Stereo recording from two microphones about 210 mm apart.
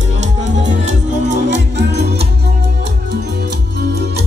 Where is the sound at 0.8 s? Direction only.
35° right (ahead or behind).